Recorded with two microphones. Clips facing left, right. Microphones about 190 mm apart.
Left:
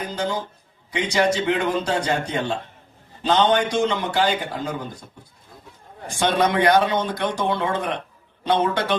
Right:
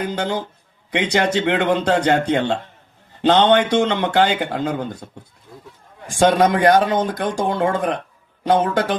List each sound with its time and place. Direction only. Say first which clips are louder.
0.2 s a man's voice: right 2 dB; 60° right (ahead or behind)
6.1 s speech: right 5 dB; 45° right (ahead or behind)